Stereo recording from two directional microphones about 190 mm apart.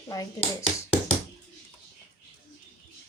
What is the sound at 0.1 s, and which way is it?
Speech, 20° left (ahead or behind).